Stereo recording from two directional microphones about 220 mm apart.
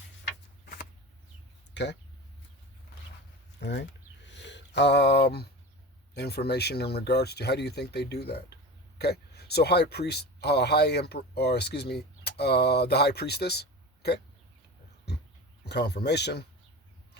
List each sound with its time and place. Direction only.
1.7 s speech: 50° left (ahead or behind)
3.6 s speech: 50° left (ahead or behind)
15.6 s speech: 50° left (ahead or behind)